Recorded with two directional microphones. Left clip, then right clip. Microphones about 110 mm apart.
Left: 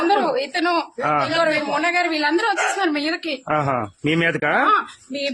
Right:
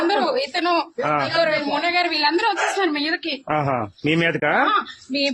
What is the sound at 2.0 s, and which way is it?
Speech, centre (ahead or behind).